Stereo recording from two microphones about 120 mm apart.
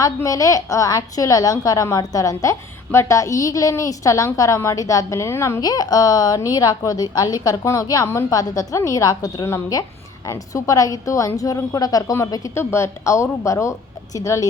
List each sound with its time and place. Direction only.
0.0 s a woman's voice: 30° left (ahead or behind)